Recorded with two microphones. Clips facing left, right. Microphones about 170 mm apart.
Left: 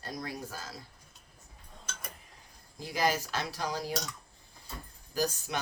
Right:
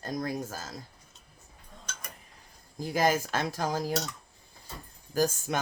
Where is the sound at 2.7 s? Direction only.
45° right (ahead or behind).